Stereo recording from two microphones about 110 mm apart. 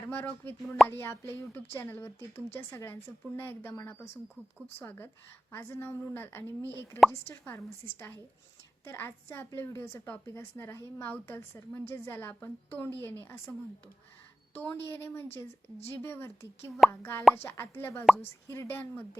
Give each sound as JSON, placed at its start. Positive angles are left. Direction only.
{"t": 0.0, "sound": "a woman's voice", "side_deg": 20}
{"t": 14.5, "sound": "a woman's voice", "side_deg": 20}